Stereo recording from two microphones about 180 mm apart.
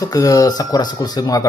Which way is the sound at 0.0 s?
20° left (ahead or behind).